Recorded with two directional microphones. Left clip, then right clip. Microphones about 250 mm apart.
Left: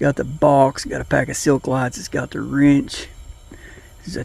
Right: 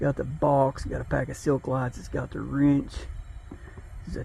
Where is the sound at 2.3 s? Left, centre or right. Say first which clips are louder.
Left 8 dB; left.